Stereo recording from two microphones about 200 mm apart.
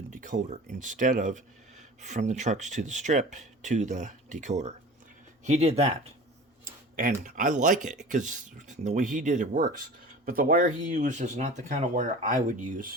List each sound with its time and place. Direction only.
0.1 s speech: 40° right (ahead or behind)
6.9 s speech: 40° right (ahead or behind)